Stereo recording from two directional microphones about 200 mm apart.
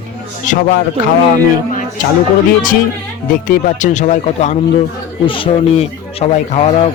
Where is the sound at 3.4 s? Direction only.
40° left (ahead or behind).